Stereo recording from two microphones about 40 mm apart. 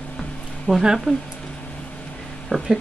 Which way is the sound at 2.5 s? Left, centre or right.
Left.